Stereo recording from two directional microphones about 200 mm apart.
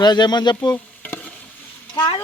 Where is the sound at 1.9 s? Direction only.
20° left (ahead or behind).